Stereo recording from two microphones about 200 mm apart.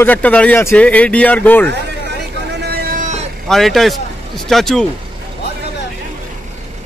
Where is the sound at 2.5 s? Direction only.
55° right (ahead or behind); by 3.2 s 40° right (ahead or behind).